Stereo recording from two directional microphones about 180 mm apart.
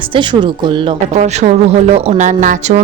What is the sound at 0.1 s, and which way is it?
Speech, 25° right (ahead or behind).